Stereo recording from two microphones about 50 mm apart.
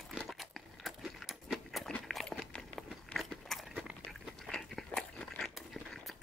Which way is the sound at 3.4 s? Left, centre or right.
Centre.